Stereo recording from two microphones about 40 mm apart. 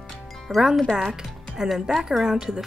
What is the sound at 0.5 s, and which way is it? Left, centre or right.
Speech, centre.